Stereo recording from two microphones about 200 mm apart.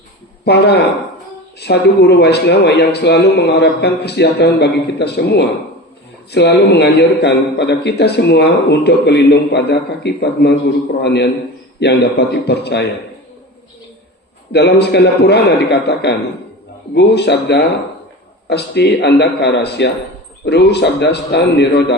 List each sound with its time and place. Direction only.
0.4 s a man's voice: 55° left (ahead or behind)
14.5 s a man's voice: 55° left (ahead or behind)